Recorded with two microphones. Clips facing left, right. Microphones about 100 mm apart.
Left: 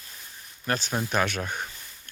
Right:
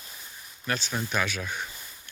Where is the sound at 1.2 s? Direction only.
55° left (ahead or behind).